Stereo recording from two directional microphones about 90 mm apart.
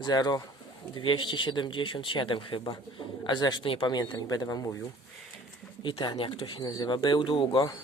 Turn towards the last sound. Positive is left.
turn(degrees=75)  # may be behind; listen again after turning